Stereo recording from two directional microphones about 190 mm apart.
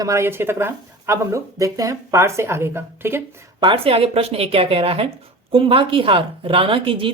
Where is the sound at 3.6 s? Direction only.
30° right (ahead or behind).